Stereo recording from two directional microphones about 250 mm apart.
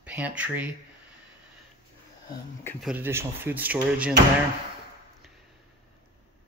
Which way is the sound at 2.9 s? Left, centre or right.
Centre.